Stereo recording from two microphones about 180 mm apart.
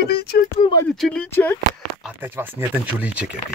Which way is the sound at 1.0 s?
5° left (ahead or behind).